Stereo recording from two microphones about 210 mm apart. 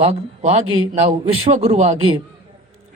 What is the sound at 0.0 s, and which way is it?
Speech, 30° right (ahead or behind).